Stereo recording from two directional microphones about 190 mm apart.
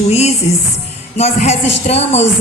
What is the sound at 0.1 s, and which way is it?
A woman's voice, 35° left (ahead or behind).